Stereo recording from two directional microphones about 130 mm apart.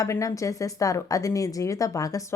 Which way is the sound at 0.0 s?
25° left (ahead or behind).